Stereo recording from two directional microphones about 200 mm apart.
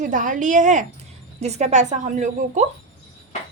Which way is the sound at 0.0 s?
40° right (ahead or behind).